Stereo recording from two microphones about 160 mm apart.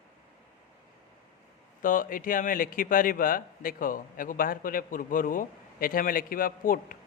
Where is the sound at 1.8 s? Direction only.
55° left (ahead or behind).